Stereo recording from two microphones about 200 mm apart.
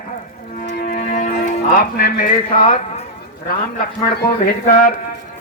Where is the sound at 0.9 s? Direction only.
35° left (ahead or behind).